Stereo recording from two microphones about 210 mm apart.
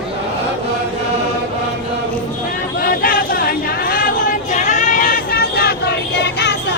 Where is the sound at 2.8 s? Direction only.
45° left (ahead or behind).